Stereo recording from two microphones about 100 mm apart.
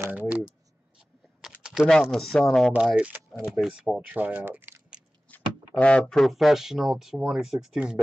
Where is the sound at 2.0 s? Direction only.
5° left (ahead or behind).